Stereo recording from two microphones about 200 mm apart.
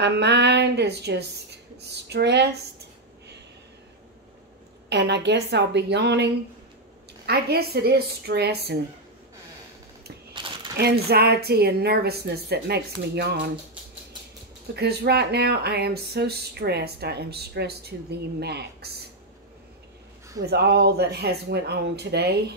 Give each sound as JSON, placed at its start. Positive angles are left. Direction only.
{"t": 0.0, "sound": "a woman's voice", "side_deg": -60}
{"t": 4.8, "sound": "a woman's voice", "side_deg": -55}
{"t": 10.8, "sound": "speech", "side_deg": -55}
{"t": 14.8, "sound": "speech", "side_deg": -55}
{"t": 20.4, "sound": "speech", "side_deg": -55}